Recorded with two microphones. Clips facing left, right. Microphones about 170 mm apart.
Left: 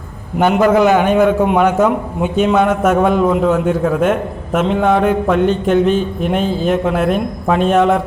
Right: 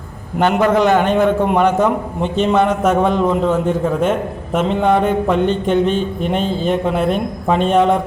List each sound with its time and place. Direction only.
0.3 s a man's voice: 5° left (ahead or behind)